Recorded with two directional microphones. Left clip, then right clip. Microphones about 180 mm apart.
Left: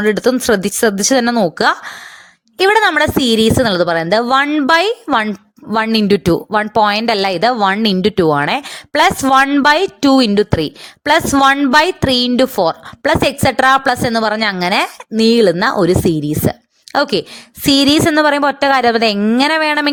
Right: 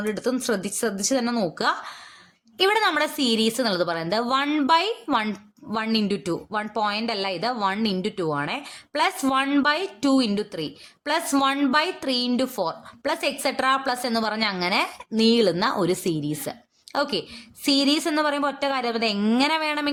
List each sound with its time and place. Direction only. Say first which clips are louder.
0.0 s a woman's voice: left 13 dB; 50° left (ahead or behind)